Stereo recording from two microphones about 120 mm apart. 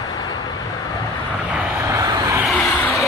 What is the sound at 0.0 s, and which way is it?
Vehicle, 35° left (ahead or behind).